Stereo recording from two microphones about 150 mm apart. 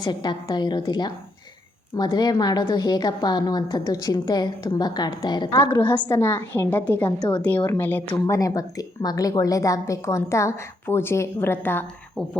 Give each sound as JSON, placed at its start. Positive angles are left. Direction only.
{"t": 0.0, "sound": "speech", "side_deg": 30}
{"t": 5.8, "sound": "a woman's voice", "side_deg": 15}